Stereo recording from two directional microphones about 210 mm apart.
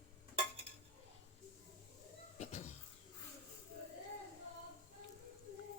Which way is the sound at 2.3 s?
30° left (ahead or behind).